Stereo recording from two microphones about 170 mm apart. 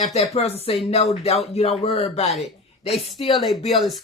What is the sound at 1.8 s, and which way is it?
Speech, 35° left (ahead or behind).